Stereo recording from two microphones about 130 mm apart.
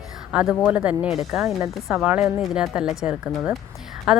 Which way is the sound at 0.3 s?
10° right (ahead or behind).